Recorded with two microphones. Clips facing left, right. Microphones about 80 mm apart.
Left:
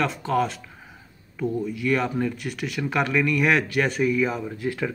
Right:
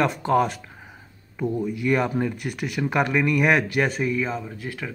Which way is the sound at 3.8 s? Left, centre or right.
Centre.